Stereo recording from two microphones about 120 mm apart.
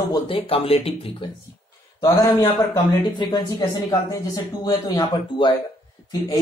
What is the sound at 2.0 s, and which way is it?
Speech, 35° left (ahead or behind).